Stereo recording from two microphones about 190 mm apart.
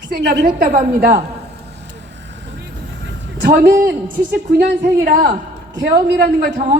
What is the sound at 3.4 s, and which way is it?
Speech, 45° right (ahead or behind).